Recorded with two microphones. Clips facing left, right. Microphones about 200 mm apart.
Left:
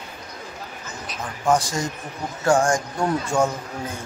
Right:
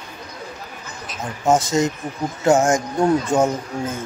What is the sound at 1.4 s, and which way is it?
Speech, 25° right (ahead or behind).